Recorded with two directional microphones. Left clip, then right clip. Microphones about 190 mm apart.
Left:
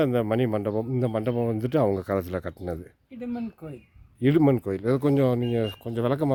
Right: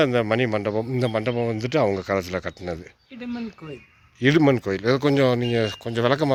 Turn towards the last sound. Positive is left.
turn(degrees=5)  # may be behind; listen again after turning